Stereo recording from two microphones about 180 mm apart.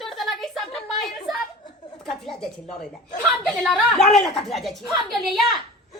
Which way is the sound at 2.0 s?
Centre (ahead or behind).